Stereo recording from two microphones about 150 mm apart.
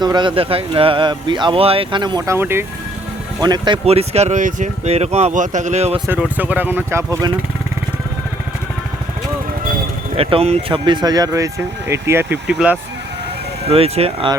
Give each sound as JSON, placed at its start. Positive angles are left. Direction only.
{"t": 0.0, "sound": "speech", "side_deg": -30}
{"t": 3.4, "sound": "speech", "side_deg": -30}
{"t": 6.1, "sound": "speech", "side_deg": -10}
{"t": 10.2, "sound": "speech", "side_deg": -40}
{"t": 12.5, "sound": "speech", "side_deg": -5}
{"t": 13.7, "sound": "speech", "side_deg": -40}